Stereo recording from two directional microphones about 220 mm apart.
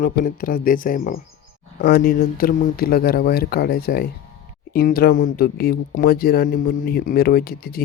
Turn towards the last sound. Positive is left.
turn(degrees=40)  # may be behind; listen again after turning